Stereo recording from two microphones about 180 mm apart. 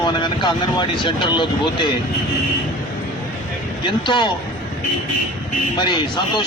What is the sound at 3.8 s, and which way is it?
Speech, 25° left (ahead or behind).